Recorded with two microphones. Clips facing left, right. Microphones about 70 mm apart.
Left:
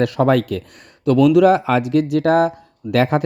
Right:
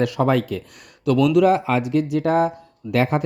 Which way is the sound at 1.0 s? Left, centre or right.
Left.